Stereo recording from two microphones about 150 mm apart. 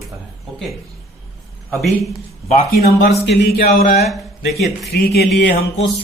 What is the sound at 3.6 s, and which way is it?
Speech, 75° left (ahead or behind).